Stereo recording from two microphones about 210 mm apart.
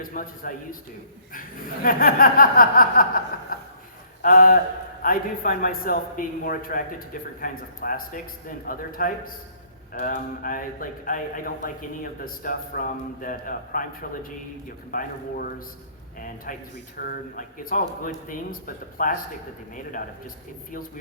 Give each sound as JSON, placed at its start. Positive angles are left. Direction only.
{"t": 0.0, "sound": "a man's voice", "side_deg": 40}
{"t": 1.3, "sound": "chuckle", "side_deg": 40}
{"t": 3.5, "sound": "a sound", "side_deg": 45}
{"t": 4.2, "sound": "a man's voice", "side_deg": 40}
{"t": 14.8, "sound": "chuckle", "side_deg": 45}
{"t": 16.1, "sound": "a man's voice", "side_deg": 40}